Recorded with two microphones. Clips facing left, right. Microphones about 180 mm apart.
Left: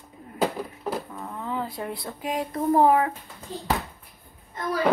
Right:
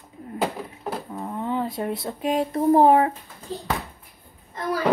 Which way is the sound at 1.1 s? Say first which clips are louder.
Right 4 dB; 25° right (ahead or behind).